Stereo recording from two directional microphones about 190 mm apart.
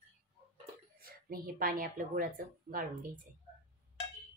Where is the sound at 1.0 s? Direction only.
50° right (ahead or behind).